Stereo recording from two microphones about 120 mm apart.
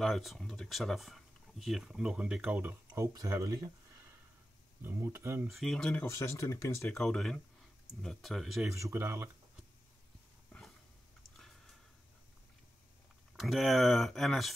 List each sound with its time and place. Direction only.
0.0 s speech: centre (ahead or behind)
3.1 s speech: 25° right (ahead or behind)
4.8 s speech: 20° right (ahead or behind)
5.5 s speech: centre (ahead or behind)
6.0 s speech: 25° left (ahead or behind)
6.9 s speech: 5° left (ahead or behind)
8.7 s speech: 20° right (ahead or behind)
10.5 s a sound: 10° left (ahead or behind)
13.4 s speech: centre (ahead or behind)